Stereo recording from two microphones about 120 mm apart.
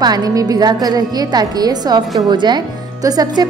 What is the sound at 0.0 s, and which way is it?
A woman's voice, 35° right (ahead or behind).